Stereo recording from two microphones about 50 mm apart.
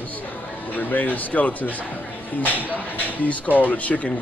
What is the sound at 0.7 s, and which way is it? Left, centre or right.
Speech, left.